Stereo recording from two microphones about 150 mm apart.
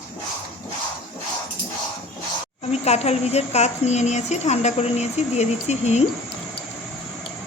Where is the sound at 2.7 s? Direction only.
45° left (ahead or behind).